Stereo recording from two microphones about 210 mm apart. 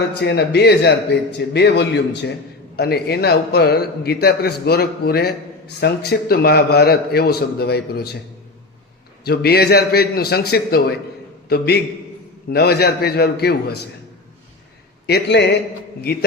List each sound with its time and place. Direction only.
0.1 s a man's voice: 50° left (ahead or behind)
9.2 s a man's voice: 50° left (ahead or behind)
15.0 s a man's voice: 50° left (ahead or behind)